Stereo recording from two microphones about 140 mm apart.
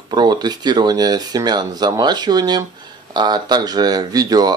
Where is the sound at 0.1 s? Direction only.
30° right (ahead or behind).